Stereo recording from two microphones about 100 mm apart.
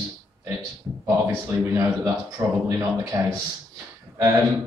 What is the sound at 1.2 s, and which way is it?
A man's voice, 30° right (ahead or behind).